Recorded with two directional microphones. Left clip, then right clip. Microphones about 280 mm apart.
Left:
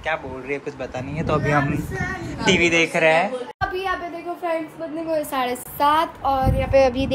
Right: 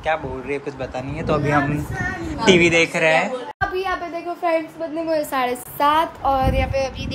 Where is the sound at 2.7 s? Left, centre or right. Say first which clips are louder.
Right 1 dB; centre.